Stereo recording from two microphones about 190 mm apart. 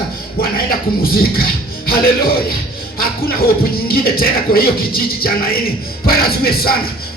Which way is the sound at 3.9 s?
50° left (ahead or behind).